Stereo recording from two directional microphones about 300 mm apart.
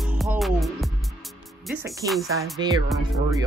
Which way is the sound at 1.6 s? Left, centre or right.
Centre.